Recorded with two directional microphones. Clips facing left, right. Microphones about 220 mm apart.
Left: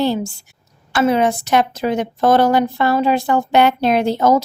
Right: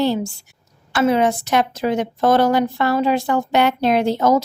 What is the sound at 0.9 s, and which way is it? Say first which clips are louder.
A woman's voice: left 1 dB; 30° left (ahead or behind).